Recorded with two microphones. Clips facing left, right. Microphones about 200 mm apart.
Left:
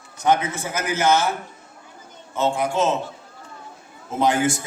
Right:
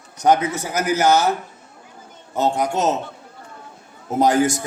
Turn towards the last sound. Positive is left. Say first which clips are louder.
# right 3 dB
turn(degrees=-40)  # may be behind; listen again after turning